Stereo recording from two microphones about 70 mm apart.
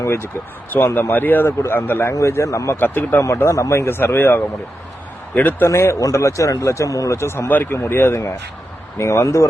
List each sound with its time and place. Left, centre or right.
0.0 s speech: left
0.9 s speech: left
2.1 s speech: left
2.7 s speech: left
3.5 s speech: left
5.6 s speech: left
7.2 s speech: left
9.0 s speech: left